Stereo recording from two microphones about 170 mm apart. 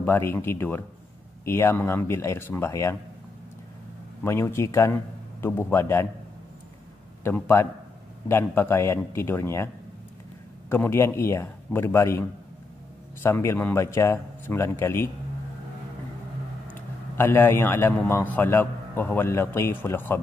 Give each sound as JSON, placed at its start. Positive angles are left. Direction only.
{"t": 0.0, "sound": "a man's voice", "side_deg": 10}
{"t": 4.2, "sound": "a man's voice", "side_deg": 15}
{"t": 7.2, "sound": "a man's voice", "side_deg": 15}
{"t": 10.7, "sound": "a man's voice", "side_deg": 15}
{"t": 17.2, "sound": "a man's voice", "side_deg": 15}